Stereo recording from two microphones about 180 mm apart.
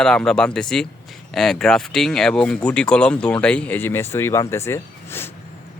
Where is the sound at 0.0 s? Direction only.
5° left (ahead or behind).